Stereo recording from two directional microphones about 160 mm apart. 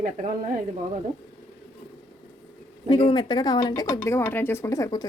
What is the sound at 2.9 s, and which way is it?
Speech, 35° left (ahead or behind).